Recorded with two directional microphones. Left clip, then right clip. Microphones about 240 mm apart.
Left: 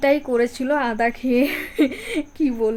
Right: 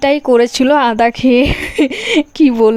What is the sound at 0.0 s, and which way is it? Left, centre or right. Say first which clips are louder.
Speech: right 8 dB; right.